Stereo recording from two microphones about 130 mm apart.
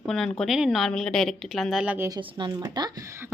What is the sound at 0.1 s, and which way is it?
Speech, 5° left (ahead or behind).